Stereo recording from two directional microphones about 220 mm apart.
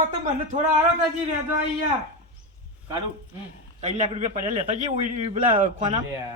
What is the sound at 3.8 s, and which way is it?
A man's voice, 30° right (ahead or behind).